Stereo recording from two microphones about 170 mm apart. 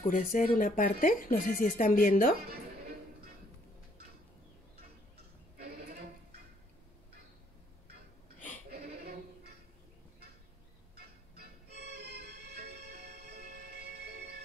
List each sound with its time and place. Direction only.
0.0 s speech: 55° left (ahead or behind)
5.6 s a sound: 65° right (ahead or behind)
8.6 s sheep: 65° right (ahead or behind)
11.8 s music: 70° right (ahead or behind)